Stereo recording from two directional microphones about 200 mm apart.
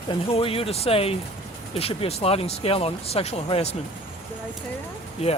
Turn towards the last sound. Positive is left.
turn(degrees=30)  # may be behind; listen again after turning